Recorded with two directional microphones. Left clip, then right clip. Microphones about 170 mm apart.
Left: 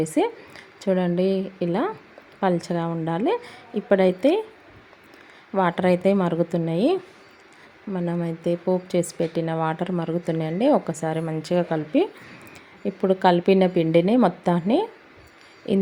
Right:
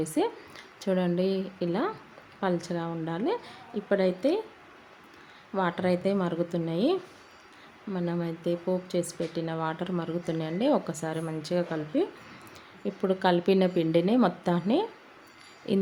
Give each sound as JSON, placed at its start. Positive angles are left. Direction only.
{"t": 0.0, "sound": "a woman's voice", "side_deg": 20}
{"t": 5.5, "sound": "a woman's voice", "side_deg": 25}